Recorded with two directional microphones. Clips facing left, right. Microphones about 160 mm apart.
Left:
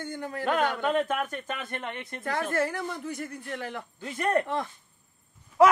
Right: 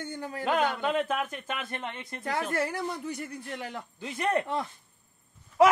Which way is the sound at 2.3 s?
10° right (ahead or behind).